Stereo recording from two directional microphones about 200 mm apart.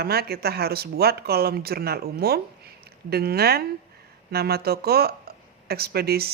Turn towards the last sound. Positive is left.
turn(degrees=-50)  # may be behind; listen again after turning